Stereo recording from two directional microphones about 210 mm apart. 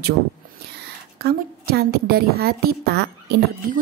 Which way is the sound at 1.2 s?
45° right (ahead or behind).